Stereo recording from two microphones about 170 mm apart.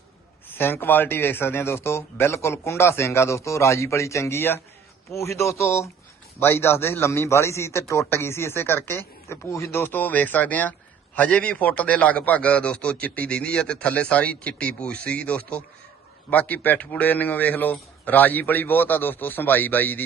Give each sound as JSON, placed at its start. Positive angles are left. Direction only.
{"t": 0.5, "sound": "a man's voice", "side_deg": 10}